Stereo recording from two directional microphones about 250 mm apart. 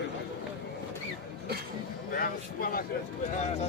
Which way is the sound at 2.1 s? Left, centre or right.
Left.